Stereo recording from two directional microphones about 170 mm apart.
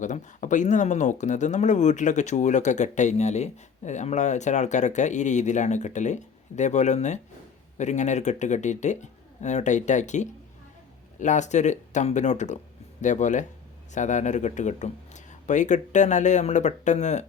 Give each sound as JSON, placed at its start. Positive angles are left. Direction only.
{"t": 0.0, "sound": "speech", "side_deg": 45}